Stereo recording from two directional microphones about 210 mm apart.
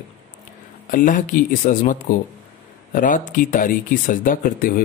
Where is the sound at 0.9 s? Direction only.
40° left (ahead or behind).